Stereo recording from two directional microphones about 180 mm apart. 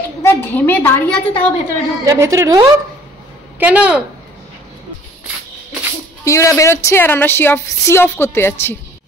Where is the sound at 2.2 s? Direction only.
15° right (ahead or behind).